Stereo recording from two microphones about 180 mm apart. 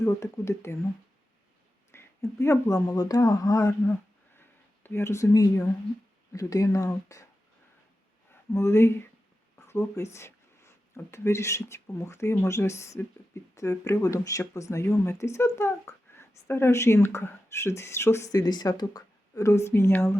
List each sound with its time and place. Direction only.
0.0 s speech: 15° left (ahead or behind)
1.9 s speech: 15° left (ahead or behind)
4.4 s a sound: 10° left (ahead or behind)
6.3 s speech: 20° left (ahead or behind)
8.3 s a sound: 15° left (ahead or behind)
9.6 s speech: 15° left (ahead or behind)